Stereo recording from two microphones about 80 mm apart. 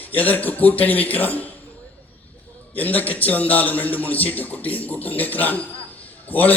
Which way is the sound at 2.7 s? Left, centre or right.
Left.